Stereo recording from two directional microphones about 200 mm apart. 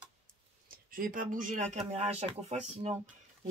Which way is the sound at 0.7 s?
45° right (ahead or behind).